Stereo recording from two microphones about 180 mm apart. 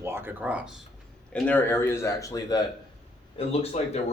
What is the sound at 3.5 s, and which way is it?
Speech, 35° left (ahead or behind).